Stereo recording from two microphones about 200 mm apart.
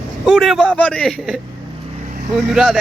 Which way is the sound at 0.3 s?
Centre (ahead or behind).